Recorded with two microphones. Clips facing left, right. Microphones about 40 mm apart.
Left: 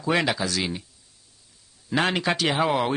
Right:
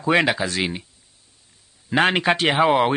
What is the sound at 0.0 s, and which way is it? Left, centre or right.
Speech, right.